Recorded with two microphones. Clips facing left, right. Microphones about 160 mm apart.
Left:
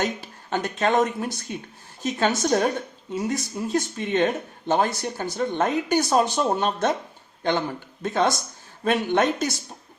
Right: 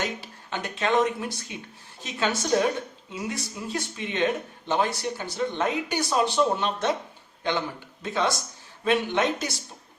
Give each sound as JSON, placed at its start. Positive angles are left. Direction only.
{"t": 0.0, "sound": "speech", "side_deg": 45}
{"t": 8.0, "sound": "speech", "side_deg": 50}